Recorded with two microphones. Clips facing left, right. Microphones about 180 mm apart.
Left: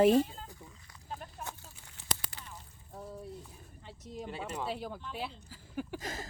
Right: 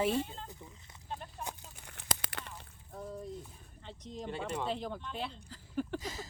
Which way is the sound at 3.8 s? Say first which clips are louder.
Right 1 dB; 5° left (ahead or behind).